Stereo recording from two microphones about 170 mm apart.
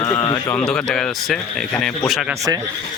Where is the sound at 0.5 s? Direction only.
5° left (ahead or behind).